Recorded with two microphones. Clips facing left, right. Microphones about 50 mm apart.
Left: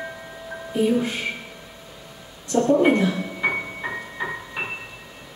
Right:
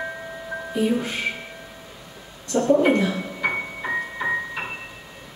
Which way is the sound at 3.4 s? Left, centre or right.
Centre.